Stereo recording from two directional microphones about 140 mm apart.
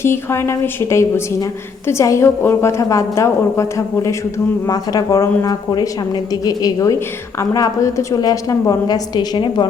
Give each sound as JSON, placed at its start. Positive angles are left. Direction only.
{"t": 0.0, "sound": "a woman's voice", "side_deg": 20}